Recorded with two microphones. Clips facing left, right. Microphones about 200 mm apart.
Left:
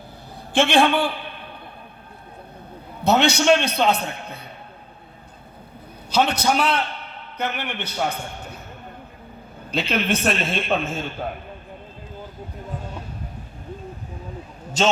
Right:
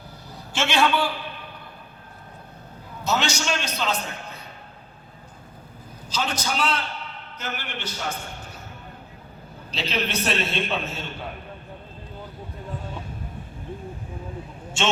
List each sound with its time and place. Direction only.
0.5 s a man's voice: 55° left (ahead or behind)
3.0 s a man's voice: 60° left (ahead or behind)
6.1 s a man's voice: 65° left (ahead or behind)
9.7 s a man's voice: 55° left (ahead or behind)